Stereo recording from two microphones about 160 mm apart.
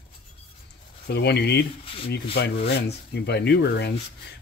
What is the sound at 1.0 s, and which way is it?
Speech, 90° left.